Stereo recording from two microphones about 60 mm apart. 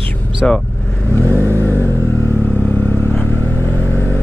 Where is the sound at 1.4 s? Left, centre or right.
Right.